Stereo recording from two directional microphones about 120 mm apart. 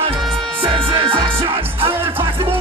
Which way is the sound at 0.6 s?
45° right (ahead or behind).